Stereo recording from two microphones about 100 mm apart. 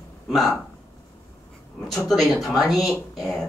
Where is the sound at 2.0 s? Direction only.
Centre (ahead or behind).